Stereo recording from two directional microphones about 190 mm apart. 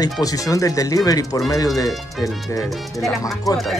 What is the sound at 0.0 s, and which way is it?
Speech, 20° left (ahead or behind).